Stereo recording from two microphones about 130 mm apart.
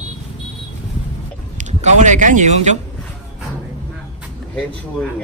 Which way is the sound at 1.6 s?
65° right (ahead or behind).